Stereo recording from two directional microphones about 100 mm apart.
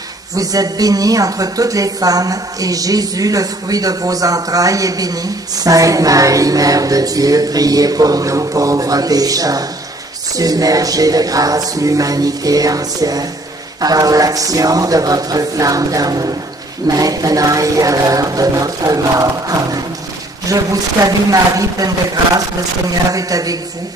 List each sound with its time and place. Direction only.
0.4 s a woman's voice: 40° right (ahead or behind)